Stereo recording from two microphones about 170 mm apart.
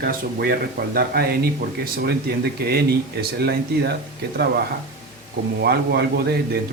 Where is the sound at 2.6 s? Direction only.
65° right (ahead or behind).